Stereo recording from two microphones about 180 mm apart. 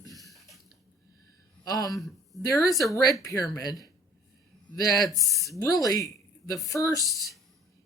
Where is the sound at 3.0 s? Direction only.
20° left (ahead or behind).